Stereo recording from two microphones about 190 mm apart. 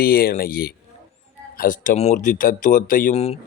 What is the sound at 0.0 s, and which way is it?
Speech, 50° left (ahead or behind).